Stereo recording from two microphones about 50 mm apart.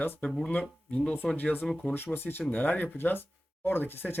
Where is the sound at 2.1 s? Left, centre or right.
Left.